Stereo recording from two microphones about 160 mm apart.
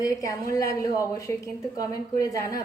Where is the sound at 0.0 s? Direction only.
20° left (ahead or behind).